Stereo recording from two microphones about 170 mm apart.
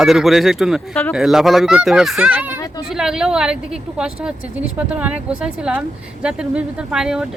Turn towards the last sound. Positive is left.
turn(degrees=-5)  # may be behind; listen again after turning